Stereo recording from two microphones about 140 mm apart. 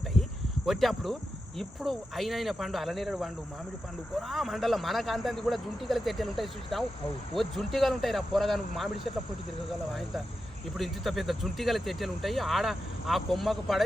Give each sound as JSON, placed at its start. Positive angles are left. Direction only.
{"t": 0.1, "sound": "speech", "side_deg": 0}
{"t": 4.3, "sound": "speech", "side_deg": 0}
{"t": 10.8, "sound": "speech", "side_deg": 0}